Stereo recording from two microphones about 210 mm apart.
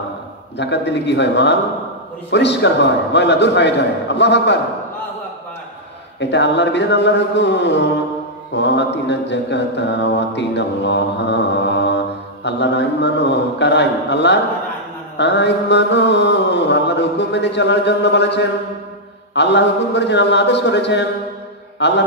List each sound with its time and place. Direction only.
0.6 s mantra: 55° left (ahead or behind)
6.1 s mantra: 55° left (ahead or behind)